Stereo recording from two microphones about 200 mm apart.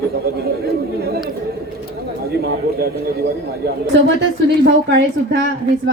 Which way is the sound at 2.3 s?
55° right (ahead or behind).